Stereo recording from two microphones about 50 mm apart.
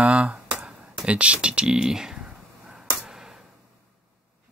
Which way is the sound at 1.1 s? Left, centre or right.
Right.